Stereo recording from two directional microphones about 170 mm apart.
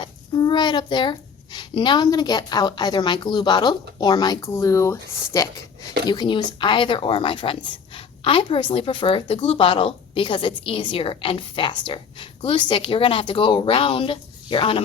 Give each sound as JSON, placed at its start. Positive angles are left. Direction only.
{"t": 0.0, "sound": "child singing", "side_deg": 25}
{"t": 1.5, "sound": "a woman's voice", "side_deg": 25}